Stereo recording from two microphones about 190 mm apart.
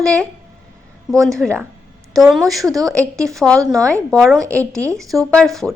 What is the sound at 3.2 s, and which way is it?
A woman's voice, centre (ahead or behind).